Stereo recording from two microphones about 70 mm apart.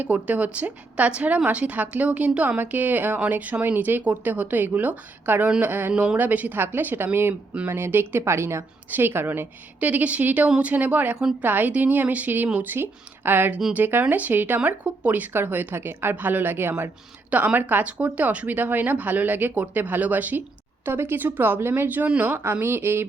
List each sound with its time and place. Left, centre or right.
0.0 s speech: right
5.9 s speech: centre
6.1 s speech: right